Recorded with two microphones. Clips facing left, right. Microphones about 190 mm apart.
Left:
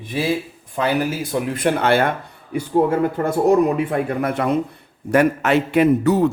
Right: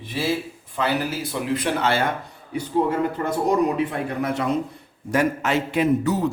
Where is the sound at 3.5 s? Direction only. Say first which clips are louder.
Left 5 dB; 50° left (ahead or behind).